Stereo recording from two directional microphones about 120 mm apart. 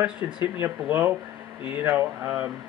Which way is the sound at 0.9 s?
15° right (ahead or behind).